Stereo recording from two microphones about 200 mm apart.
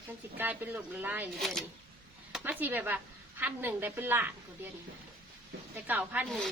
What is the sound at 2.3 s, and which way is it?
Speech, 10° right (ahead or behind).